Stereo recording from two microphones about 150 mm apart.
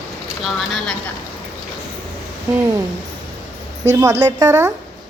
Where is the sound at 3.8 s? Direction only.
20° right (ahead or behind).